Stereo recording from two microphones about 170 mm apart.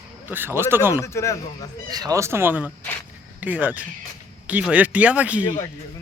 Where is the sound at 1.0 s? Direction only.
15° left (ahead or behind).